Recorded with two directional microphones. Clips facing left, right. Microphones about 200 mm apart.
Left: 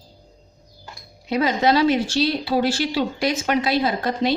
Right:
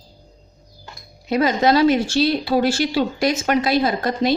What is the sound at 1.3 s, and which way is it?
Speech, 45° right (ahead or behind).